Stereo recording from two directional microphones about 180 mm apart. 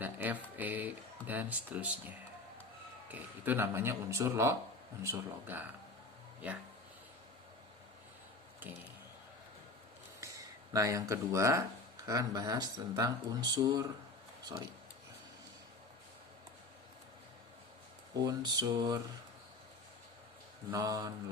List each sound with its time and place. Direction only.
0.0 s a sound: 10° right (ahead or behind)
1.3 s speech: 10° right (ahead or behind)
10.2 s a sound: 20° right (ahead or behind)
12.0 s speech: 20° right (ahead or behind)
18.3 s speech: 20° right (ahead or behind)
20.7 s speech: 20° right (ahead or behind)